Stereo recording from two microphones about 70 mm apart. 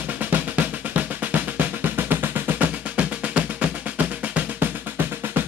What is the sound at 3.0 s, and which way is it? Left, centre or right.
Music, centre.